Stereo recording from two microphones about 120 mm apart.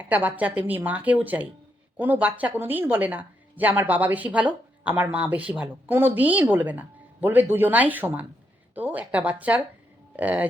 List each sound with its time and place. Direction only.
0.0 s speech: 15° right (ahead or behind)